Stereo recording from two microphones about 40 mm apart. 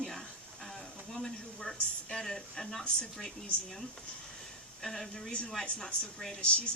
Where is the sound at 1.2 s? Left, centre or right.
Centre.